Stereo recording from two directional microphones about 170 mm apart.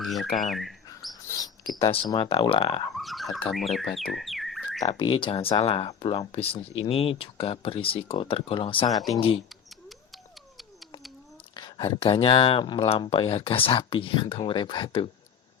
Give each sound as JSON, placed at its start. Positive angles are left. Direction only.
{"t": 0.0, "sound": "bird", "side_deg": 0}
{"t": 0.3, "sound": "speech", "side_deg": 0}
{"t": 1.3, "sound": "mouse", "side_deg": 20}
{"t": 1.8, "sound": "speech", "side_deg": 30}
{"t": 2.9, "sound": "a sound", "side_deg": 0}
{"t": 3.5, "sound": "speech", "side_deg": 0}
{"t": 4.8, "sound": "speech", "side_deg": 25}
{"t": 11.5, "sound": "speech", "side_deg": 25}